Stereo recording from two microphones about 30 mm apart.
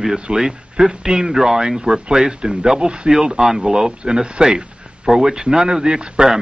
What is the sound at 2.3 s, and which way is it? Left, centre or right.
Speech, right.